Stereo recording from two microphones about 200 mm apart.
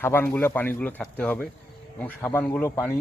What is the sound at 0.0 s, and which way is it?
Speech, 10° left (ahead or behind).